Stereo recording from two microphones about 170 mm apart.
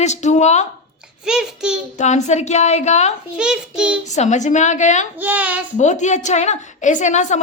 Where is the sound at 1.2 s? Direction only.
5° right (ahead or behind).